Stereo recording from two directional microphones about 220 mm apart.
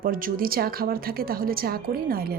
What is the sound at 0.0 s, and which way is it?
Speech, 40° right (ahead or behind).